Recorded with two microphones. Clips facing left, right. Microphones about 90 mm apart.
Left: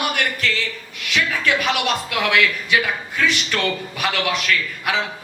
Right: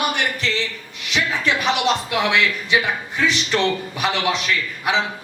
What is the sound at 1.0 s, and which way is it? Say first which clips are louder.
Speech: even; 20° right (ahead or behind).